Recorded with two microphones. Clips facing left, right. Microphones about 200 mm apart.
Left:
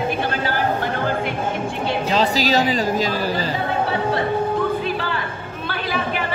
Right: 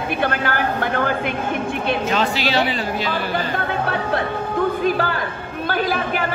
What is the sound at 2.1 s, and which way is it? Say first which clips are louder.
A woman's voice: left 6 dB; 35° left (ahead or behind).